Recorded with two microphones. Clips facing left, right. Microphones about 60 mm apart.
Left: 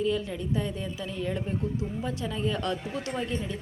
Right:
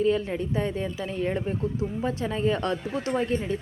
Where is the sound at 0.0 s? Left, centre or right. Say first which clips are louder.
Right 4 dB; right.